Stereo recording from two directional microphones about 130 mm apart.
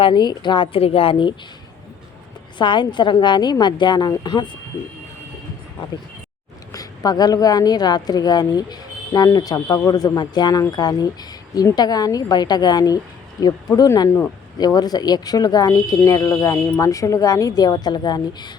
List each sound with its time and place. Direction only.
0.0 s a woman's voice: 35° left (ahead or behind)
2.6 s a woman's voice: 40° left (ahead or behind)
6.7 s a woman's voice: 30° left (ahead or behind)